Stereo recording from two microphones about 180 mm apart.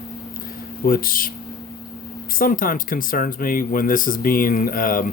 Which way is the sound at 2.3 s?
50° left (ahead or behind).